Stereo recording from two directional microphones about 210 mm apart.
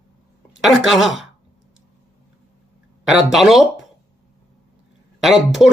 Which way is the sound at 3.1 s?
Centre (ahead or behind).